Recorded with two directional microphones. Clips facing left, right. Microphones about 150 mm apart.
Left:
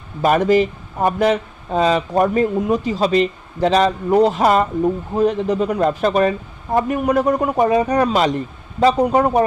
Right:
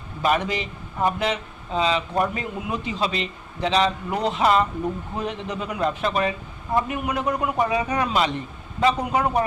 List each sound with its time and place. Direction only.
0.2 s a man's voice: 45° left (ahead or behind)